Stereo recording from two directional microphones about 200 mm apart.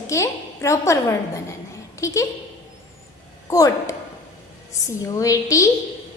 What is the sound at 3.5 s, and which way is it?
A woman's voice, 15° left (ahead or behind).